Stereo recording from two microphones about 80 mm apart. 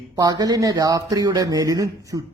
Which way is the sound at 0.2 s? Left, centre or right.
Right.